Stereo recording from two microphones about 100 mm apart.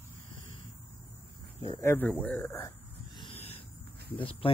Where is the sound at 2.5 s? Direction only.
25° left (ahead or behind).